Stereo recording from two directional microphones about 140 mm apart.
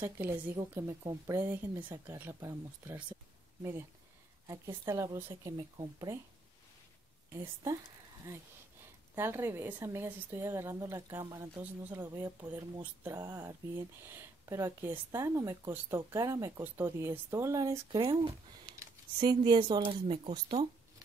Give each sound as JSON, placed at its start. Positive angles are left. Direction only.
{"t": 0.0, "sound": "a woman's voice", "side_deg": -15}
{"t": 4.5, "sound": "speech", "side_deg": -20}
{"t": 7.4, "sound": "a woman's voice", "side_deg": -25}